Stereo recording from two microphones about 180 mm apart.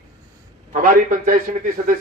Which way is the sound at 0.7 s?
45° right (ahead or behind).